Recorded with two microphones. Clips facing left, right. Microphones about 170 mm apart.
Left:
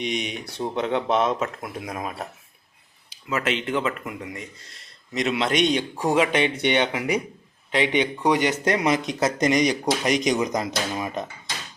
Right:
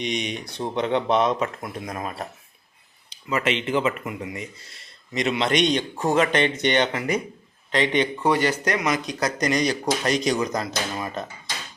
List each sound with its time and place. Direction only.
0.0 s speech: 5° left (ahead or behind)